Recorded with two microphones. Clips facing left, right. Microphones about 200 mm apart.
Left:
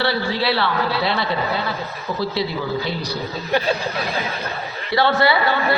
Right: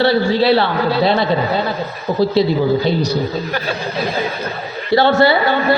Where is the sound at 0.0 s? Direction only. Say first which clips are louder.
Right 8 dB; 25° right (ahead or behind).